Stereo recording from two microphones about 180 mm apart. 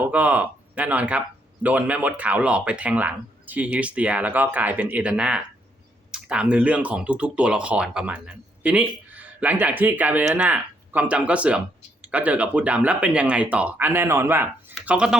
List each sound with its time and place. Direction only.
0.0 s speech: 10° right (ahead or behind)